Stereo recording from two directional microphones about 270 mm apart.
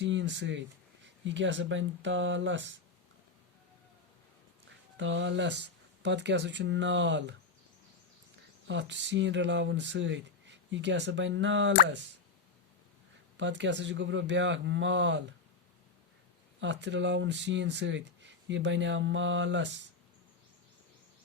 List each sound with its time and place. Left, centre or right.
0.0 s speech: right
4.9 s speech: right
8.6 s speech: right
13.3 s speech: right
16.6 s speech: right